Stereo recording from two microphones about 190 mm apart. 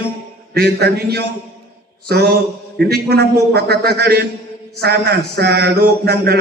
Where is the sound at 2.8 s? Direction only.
55° right (ahead or behind).